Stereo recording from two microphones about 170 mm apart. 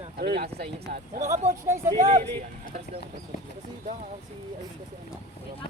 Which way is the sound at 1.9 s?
40° right (ahead or behind).